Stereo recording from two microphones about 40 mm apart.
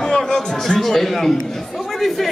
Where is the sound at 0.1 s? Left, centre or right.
Centre.